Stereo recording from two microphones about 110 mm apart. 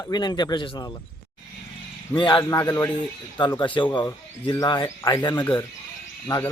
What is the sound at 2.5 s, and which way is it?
Speech, 35° left (ahead or behind).